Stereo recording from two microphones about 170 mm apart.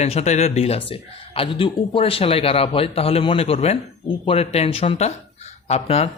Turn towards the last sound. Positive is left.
turn(degrees=35)  # may be behind; listen again after turning